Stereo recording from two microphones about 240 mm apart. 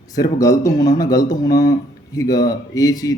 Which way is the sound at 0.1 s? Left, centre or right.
Centre.